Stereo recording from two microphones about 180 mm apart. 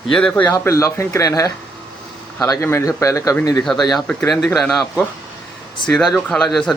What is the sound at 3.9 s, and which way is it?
A man's voice, centre (ahead or behind).